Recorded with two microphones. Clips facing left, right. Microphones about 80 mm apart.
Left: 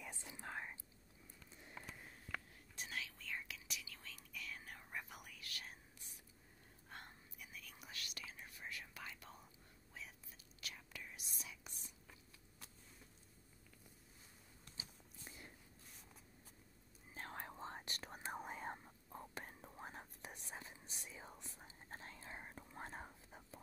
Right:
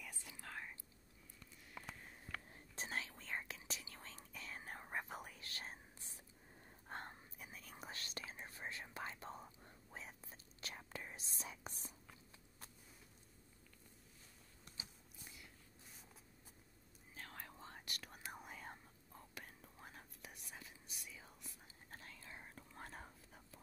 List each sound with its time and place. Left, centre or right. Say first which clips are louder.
0.0 s whispering: left 3 dB; left
2.7 s whispering: right 3 dB; right
15.2 s walk: left 3 dB; left
17.1 s whispering: left 4 dB; left